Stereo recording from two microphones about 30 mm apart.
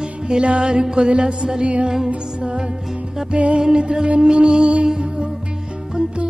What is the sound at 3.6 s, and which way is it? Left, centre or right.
Music, right.